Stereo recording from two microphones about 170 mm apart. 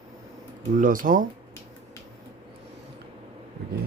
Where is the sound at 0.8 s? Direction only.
55° right (ahead or behind).